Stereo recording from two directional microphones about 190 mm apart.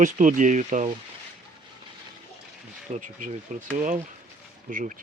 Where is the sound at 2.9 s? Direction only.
40° right (ahead or behind).